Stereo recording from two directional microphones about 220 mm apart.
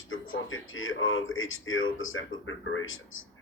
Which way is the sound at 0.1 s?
65° left (ahead or behind).